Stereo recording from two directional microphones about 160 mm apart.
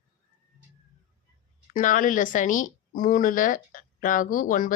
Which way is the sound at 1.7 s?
55° left (ahead or behind).